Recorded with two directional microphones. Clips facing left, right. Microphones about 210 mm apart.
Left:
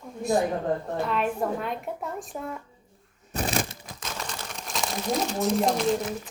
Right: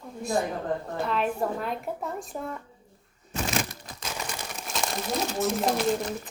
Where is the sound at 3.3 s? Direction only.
35° left (ahead or behind).